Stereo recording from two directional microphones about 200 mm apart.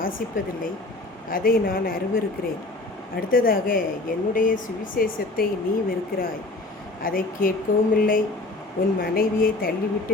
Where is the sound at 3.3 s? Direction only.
45° left (ahead or behind).